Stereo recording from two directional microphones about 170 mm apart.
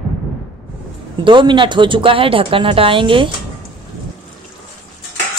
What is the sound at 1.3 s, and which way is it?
Speech, 30° right (ahead or behind).